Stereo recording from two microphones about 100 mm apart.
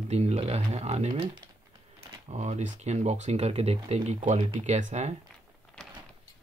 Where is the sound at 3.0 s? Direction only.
90° right.